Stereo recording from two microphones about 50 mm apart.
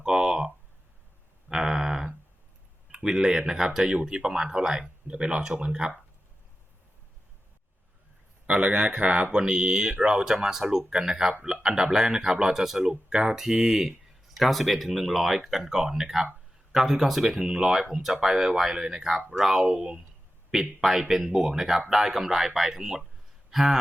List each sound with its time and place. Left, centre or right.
0.0 s a sound: centre
2.9 s speech: centre
8.4 s a man's voice: right; by 23.7 s centre